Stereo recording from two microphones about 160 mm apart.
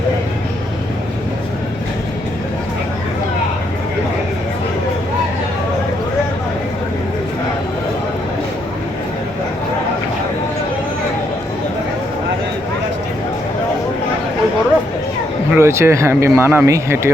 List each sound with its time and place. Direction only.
15.5 s speech: 15° right (ahead or behind)